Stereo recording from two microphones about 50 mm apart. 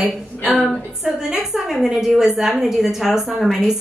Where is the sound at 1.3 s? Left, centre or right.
Centre.